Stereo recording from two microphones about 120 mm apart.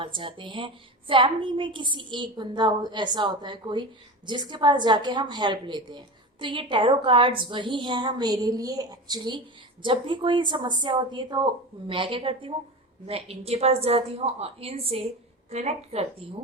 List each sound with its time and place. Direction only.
0.2 s a woman's voice: 45° right (ahead or behind); by 16.4 s 60° right (ahead or behind)